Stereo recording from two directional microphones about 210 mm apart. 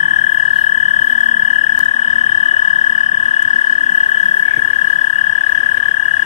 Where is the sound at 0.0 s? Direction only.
30° left (ahead or behind).